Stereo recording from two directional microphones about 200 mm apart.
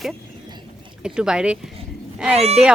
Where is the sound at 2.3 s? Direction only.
30° right (ahead or behind).